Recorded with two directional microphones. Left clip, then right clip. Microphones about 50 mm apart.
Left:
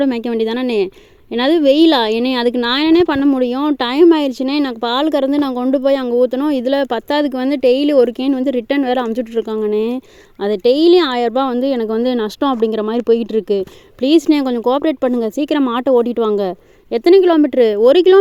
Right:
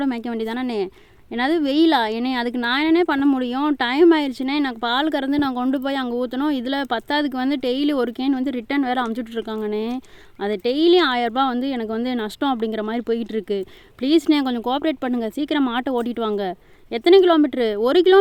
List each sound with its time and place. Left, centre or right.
0.0 s a woman's voice: centre
3.2 s speech: centre
3.4 s a woman's voice: centre
3.8 s speech: left
4.1 s a woman's voice: centre
9.6 s a woman's voice: centre
15.2 s speech: left
15.6 s a woman's voice: centre